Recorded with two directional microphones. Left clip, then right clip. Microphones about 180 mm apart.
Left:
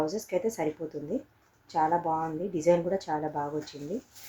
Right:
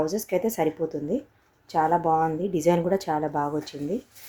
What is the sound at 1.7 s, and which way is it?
A woman's voice, 55° right (ahead or behind).